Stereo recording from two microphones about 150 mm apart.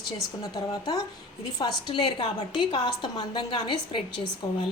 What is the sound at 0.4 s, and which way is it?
A woman's voice, 25° left (ahead or behind).